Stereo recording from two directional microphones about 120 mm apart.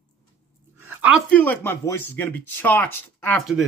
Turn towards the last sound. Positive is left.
turn(degrees=15)  # may be behind; listen again after turning